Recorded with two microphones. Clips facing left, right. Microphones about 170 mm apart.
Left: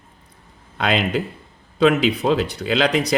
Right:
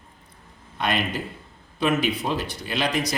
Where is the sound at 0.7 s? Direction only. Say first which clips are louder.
Left 5 dB; 90° left.